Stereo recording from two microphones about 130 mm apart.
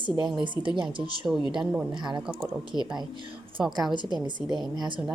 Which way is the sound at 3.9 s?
35° right (ahead or behind).